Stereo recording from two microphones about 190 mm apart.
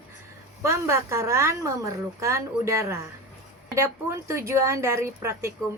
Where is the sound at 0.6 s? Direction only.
15° right (ahead or behind).